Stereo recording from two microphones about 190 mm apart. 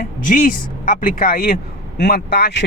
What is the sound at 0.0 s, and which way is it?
Speech, 45° left (ahead or behind).